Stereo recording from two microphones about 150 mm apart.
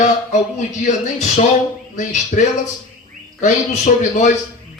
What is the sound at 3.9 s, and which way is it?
Speech, 60° left (ahead or behind).